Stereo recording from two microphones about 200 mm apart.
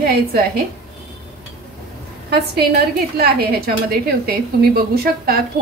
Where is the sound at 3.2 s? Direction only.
50° right (ahead or behind).